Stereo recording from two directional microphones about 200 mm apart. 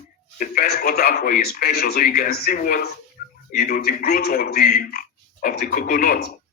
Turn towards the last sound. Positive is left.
turn(degrees=50)  # may be behind; listen again after turning